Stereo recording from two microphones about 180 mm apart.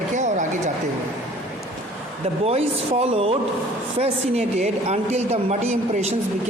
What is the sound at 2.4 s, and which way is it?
A woman's voice, 35° right (ahead or behind).